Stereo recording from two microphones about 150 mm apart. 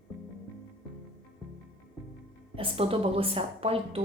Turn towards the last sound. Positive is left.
turn(degrees=-40)  # may be behind; listen again after turning